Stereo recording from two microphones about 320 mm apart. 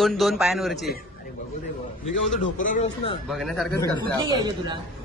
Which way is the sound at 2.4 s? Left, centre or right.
Left.